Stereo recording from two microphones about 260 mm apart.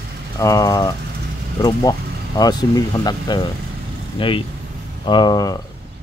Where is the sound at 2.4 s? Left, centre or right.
Centre.